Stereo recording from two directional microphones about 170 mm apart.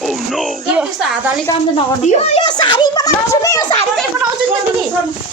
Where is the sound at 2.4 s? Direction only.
25° left (ahead or behind).